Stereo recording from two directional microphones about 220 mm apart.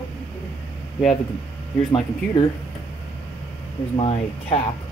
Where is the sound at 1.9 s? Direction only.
20° left (ahead or behind).